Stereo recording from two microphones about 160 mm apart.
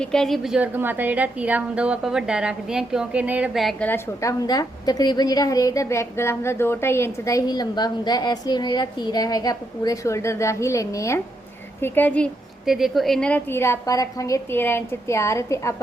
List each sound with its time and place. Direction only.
0.0 s a woman's voice: 5° left (ahead or behind); by 15.7 s 20° left (ahead or behind)